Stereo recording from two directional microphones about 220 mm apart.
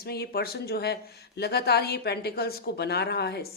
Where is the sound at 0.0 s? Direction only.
45° left (ahead or behind).